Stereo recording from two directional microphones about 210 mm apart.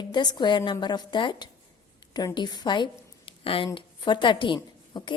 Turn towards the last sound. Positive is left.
turn(degrees=20)  # may be behind; listen again after turning